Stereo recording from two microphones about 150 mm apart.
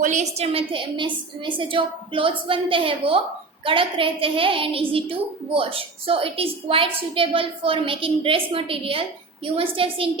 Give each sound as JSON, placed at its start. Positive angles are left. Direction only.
{"t": 0.0, "sound": "a woman's voice", "side_deg": -50}